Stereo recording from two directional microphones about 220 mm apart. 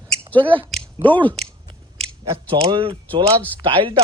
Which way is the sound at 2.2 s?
20° right (ahead or behind).